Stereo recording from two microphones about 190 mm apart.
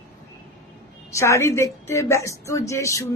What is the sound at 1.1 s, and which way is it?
A woman's voice, 15° left (ahead or behind).